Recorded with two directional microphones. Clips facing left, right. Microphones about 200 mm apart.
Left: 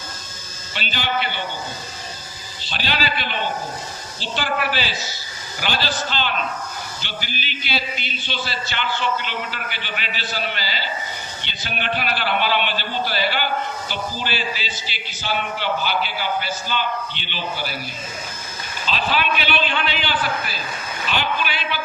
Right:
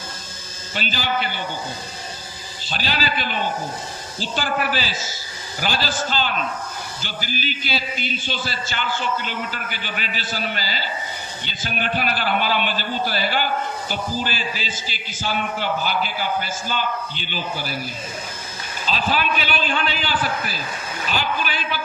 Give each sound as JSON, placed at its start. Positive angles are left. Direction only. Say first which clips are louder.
{"t": 0.7, "sound": "a man's voice", "louder": "right 1 dB", "side_deg": -40}
{"t": 2.6, "sound": "a man's voice", "louder": "even", "side_deg": -40}
{"t": 18.9, "sound": "a man's voice", "louder": "even", "side_deg": -40}